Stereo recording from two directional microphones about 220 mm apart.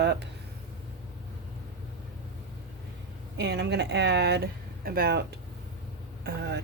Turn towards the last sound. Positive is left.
turn(degrees=-50)  # may be behind; listen again after turning